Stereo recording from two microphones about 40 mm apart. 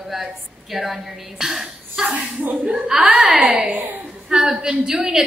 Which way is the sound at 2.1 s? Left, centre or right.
Right.